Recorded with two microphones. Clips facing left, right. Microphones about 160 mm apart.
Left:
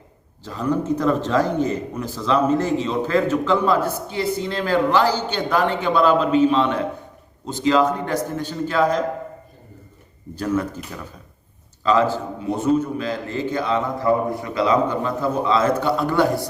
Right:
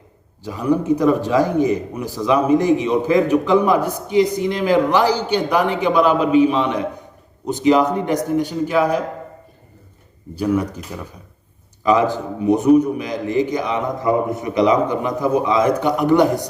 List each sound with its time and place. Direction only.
0.4 s a man's voice: 10° right (ahead or behind)
10.3 s a man's voice: 10° right (ahead or behind)
11.8 s a man's voice: 15° right (ahead or behind)